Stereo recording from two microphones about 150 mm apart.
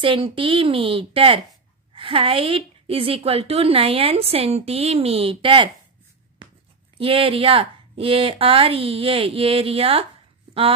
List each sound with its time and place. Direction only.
0.0 s a woman's voice: 35° right (ahead or behind)
7.0 s a woman's voice: 35° right (ahead or behind)